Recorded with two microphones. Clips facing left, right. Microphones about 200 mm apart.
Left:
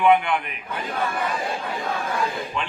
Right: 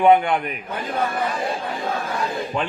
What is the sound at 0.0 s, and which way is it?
Speech, 40° right (ahead or behind).